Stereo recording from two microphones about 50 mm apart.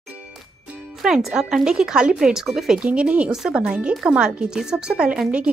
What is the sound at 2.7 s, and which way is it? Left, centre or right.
Speech, right.